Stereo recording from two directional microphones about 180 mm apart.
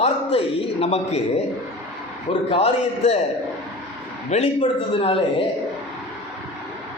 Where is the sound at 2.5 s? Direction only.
35° left (ahead or behind).